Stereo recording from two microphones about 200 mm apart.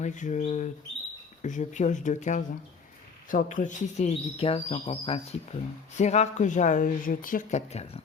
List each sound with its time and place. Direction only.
0.0 s speech: 40° left (ahead or behind)